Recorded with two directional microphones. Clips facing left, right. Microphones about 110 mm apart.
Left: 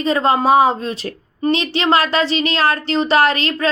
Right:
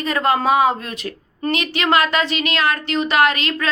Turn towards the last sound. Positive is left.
turn(degrees=35)  # may be behind; listen again after turning